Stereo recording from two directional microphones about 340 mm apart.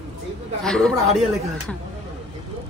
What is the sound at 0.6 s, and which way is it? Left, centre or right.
Speech, centre.